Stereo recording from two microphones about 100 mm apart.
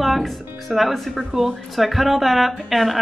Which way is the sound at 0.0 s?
Centre (ahead or behind).